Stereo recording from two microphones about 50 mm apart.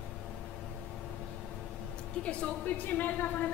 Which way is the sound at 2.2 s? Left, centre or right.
Left.